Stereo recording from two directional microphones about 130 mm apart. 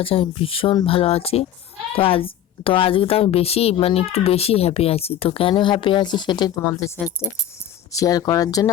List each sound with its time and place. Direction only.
0.0 s a woman's voice: 45° left (ahead or behind); by 8.7 s 30° left (ahead or behind)